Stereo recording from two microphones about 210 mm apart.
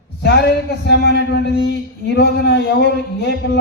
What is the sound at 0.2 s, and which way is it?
A man's voice, 55° left (ahead or behind).